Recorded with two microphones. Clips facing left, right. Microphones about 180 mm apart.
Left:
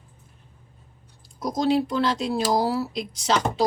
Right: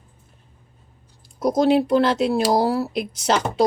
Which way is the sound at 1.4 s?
60° right (ahead or behind).